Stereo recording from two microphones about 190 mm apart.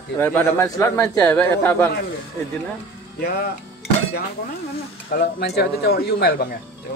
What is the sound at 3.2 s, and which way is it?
Speech, 55° left (ahead or behind).